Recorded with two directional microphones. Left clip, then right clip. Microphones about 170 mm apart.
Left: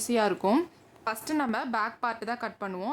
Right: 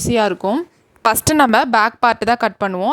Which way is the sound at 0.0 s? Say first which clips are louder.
Right 10 dB; 40° right (ahead or behind).